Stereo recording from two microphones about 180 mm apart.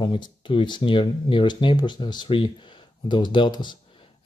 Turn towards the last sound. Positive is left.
turn(degrees=25)  # may be behind; listen again after turning